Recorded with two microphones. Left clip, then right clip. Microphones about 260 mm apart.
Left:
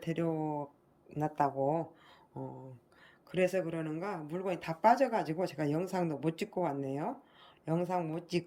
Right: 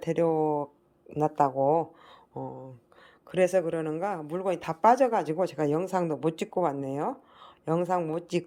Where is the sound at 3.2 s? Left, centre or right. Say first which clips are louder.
Right 7 dB; centre.